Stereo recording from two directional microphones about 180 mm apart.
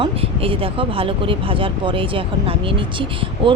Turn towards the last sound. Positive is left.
turn(degrees=-30)  # may be behind; listen again after turning